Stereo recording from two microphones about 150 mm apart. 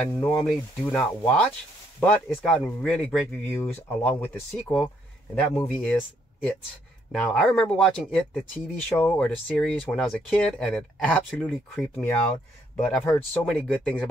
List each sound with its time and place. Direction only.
0.1 s speech: 20° left (ahead or behind)
0.4 s speech: 5° left (ahead or behind)